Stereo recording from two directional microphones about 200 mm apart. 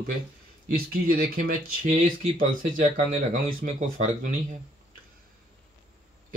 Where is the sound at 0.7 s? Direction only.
50° right (ahead or behind).